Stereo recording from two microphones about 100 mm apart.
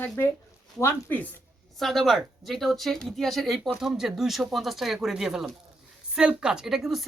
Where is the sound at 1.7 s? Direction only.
Centre (ahead or behind).